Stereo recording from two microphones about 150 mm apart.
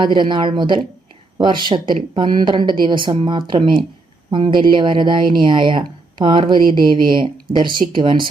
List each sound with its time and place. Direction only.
0.0 s speech: 30° right (ahead or behind)